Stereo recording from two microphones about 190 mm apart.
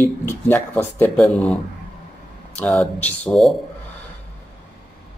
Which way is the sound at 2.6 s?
10° left (ahead or behind).